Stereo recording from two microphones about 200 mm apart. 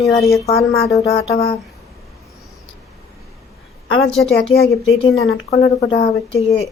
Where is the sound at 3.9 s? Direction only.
30° left (ahead or behind).